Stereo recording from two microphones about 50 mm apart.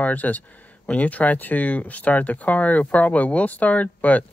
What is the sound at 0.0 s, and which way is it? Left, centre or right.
Speech, left.